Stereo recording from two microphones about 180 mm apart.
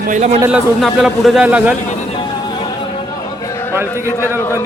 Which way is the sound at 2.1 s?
25° left (ahead or behind).